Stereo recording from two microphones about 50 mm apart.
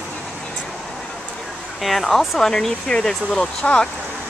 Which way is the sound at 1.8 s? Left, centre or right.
Centre.